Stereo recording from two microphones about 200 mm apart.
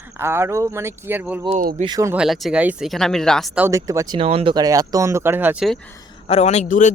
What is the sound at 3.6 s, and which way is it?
Speech, 15° right (ahead or behind).